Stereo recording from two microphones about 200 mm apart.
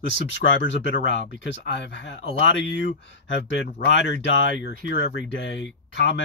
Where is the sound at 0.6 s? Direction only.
65° left (ahead or behind).